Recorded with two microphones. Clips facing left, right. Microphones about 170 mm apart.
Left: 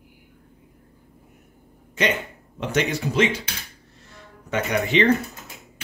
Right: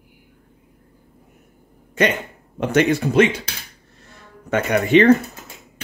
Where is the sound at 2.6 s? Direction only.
55° right (ahead or behind).